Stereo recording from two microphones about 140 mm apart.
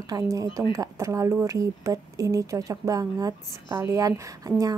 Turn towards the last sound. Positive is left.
turn(degrees=-25)  # may be behind; listen again after turning